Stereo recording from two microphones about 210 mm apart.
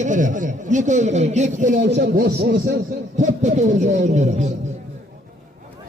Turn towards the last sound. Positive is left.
turn(degrees=-35)  # may be behind; listen again after turning